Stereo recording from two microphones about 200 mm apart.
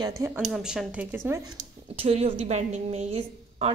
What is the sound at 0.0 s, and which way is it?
Speech, 15° right (ahead or behind).